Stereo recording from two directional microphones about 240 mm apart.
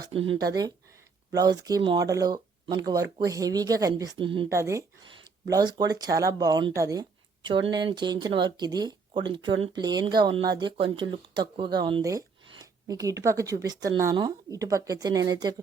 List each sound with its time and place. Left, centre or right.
0.3 s speech: centre